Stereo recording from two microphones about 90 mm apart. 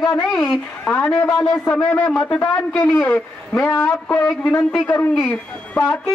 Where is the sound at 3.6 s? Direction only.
25° left (ahead or behind).